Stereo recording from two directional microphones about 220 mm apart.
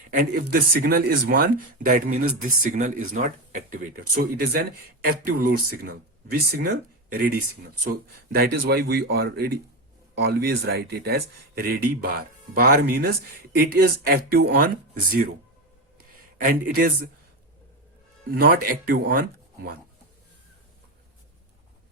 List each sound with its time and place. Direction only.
0.1 s speech: 40° right (ahead or behind)
16.4 s speech: 40° right (ahead or behind)
18.3 s speech: 40° right (ahead or behind)